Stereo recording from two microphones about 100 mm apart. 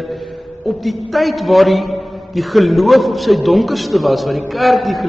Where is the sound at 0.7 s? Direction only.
Centre (ahead or behind).